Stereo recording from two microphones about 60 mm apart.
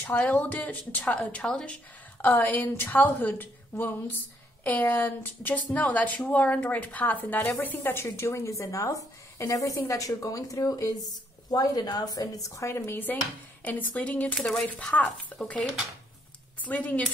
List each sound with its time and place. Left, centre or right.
0.0 s a woman's voice: left
8.0 s speech: left
11.5 s a woman's voice: left
13.7 s a woman's voice: left
16.6 s a woman's voice: left